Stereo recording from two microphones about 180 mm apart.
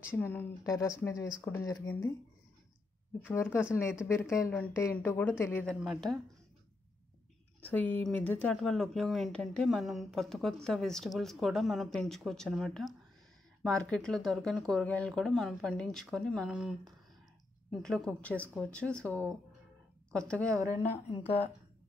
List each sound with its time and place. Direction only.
0.1 s speech: 10° left (ahead or behind)
3.3 s speech: 10° left (ahead or behind)
5.8 s speech: centre (ahead or behind)
7.6 s speech: 10° left (ahead or behind)
20.4 s a woman's voice: 15° right (ahead or behind)